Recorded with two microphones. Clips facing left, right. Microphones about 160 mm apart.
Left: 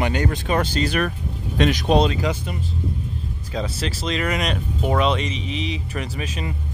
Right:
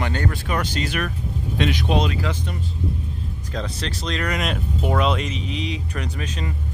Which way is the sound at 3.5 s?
5° left (ahead or behind).